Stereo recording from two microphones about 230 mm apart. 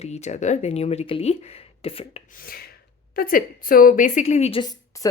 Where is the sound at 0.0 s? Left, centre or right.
Left.